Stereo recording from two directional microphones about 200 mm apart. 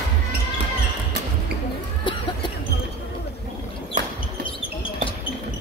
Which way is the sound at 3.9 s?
40° right (ahead or behind).